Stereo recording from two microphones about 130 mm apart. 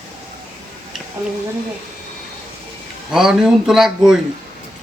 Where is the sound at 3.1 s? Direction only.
5° right (ahead or behind).